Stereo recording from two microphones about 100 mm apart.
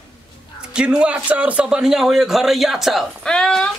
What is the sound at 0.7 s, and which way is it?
Speech, 10° right (ahead or behind).